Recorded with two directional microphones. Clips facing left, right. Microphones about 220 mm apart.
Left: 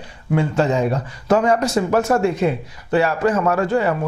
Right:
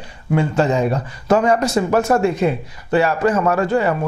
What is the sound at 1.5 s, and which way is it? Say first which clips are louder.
Speech: right 1 dB; 10° right (ahead or behind).